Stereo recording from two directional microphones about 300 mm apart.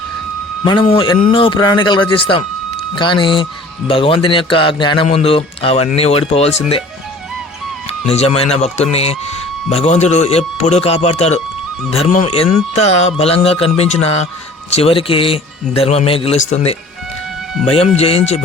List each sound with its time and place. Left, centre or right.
0.6 s speech: centre
8.0 s speech: left